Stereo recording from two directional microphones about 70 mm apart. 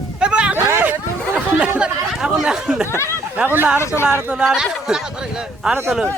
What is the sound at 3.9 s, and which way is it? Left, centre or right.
Speech, left.